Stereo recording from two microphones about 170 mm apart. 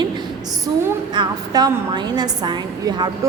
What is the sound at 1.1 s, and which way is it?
A woman's voice, 25° right (ahead or behind).